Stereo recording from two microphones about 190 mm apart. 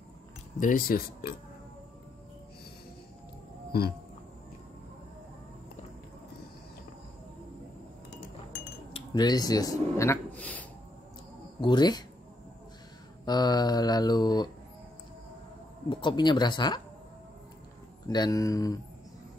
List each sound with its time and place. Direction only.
0.6 s speech: 45° left (ahead or behind)
8.9 s a man's voice: 20° left (ahead or behind)
11.6 s speech: 20° left (ahead or behind)
13.2 s speech: 20° left (ahead or behind)
15.9 s speech: 25° left (ahead or behind)
18.0 s speech: 20° left (ahead or behind)